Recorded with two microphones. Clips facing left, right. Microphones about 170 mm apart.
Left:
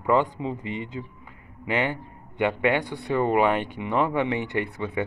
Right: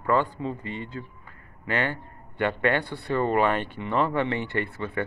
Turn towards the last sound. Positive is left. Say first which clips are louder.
# left 2 dB
turn(degrees=15)  # may be behind; listen again after turning